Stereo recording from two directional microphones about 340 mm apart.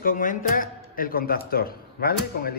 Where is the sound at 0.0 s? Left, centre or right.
Left.